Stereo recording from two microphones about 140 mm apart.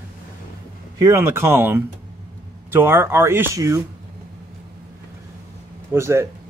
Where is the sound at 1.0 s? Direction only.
20° right (ahead or behind).